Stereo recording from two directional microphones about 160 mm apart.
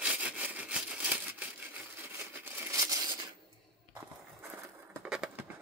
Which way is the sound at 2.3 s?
15° right (ahead or behind).